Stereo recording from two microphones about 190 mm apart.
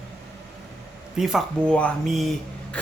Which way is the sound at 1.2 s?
Centre (ahead or behind).